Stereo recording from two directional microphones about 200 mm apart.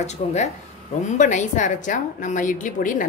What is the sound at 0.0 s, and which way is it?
A woman's voice, 35° left (ahead or behind).